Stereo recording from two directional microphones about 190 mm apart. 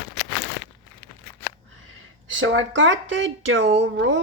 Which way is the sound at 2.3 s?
90° right.